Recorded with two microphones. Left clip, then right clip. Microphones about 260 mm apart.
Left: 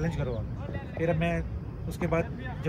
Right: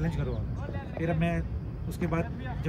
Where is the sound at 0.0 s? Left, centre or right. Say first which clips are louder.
Left 2 dB; centre.